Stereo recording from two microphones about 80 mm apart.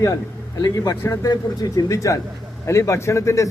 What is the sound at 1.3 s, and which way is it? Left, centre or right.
A man's voice, left.